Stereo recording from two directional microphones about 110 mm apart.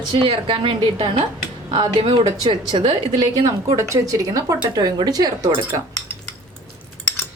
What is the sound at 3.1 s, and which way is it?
A woman's voice, 35° right (ahead or behind).